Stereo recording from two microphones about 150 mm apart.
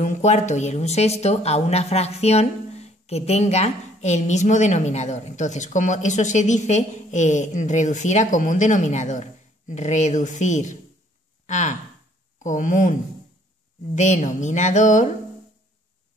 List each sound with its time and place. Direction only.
0.0 s speech: 50° left (ahead or behind)
13.9 s speech: 55° left (ahead or behind)